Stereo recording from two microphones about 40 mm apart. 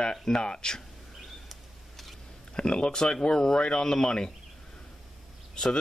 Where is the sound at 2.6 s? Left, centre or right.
Left.